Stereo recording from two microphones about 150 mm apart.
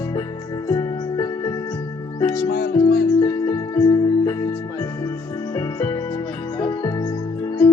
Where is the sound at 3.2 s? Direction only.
25° left (ahead or behind).